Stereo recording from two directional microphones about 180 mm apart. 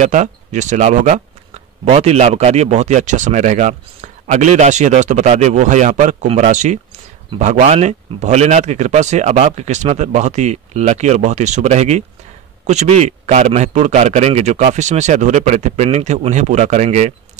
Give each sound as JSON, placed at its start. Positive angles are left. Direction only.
{"t": 0.0, "sound": "speech", "side_deg": -40}